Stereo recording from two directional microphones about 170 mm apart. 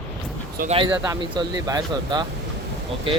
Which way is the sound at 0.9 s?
10° right (ahead or behind).